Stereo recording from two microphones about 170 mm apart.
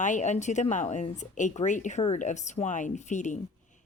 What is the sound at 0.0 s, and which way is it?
Speech, 45° left (ahead or behind).